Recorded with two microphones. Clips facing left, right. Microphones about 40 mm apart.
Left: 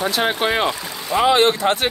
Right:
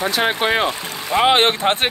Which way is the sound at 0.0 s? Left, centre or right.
Centre.